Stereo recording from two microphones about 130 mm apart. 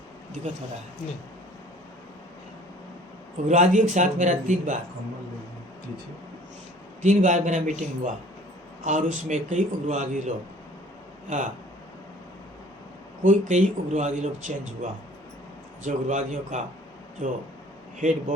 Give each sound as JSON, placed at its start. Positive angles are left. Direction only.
{"t": 3.5, "sound": "a man's voice", "side_deg": -70}
{"t": 7.0, "sound": "a man's voice", "side_deg": -70}
{"t": 13.2, "sound": "a man's voice", "side_deg": -70}
{"t": 15.8, "sound": "a man's voice", "side_deg": -70}